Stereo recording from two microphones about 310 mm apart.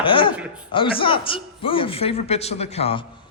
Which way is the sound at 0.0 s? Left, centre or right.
Centre.